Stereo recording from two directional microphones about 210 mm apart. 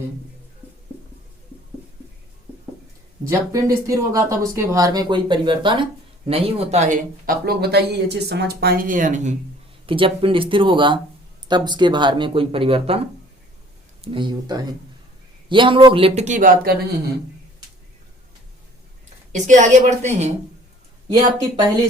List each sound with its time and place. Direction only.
3.2 s speech: 15° right (ahead or behind); by 9.3 s 35° right (ahead or behind)
9.8 s speech: 25° right (ahead or behind)
14.0 s speech: 25° right (ahead or behind)
19.3 s a woman's voice: 35° right (ahead or behind)
21.1 s speech: 20° right (ahead or behind)